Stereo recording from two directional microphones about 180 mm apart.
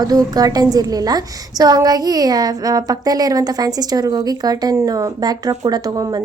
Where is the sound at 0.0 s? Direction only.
20° right (ahead or behind).